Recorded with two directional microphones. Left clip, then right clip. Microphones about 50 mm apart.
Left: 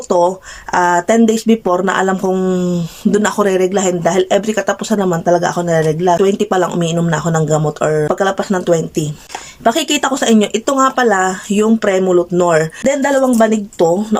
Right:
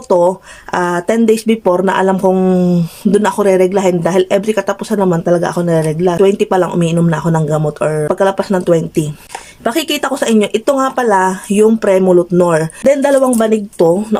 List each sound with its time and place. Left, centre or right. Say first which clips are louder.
0.1 s speech: right 2 dB; right
9.6 s speech: left 2 dB; centre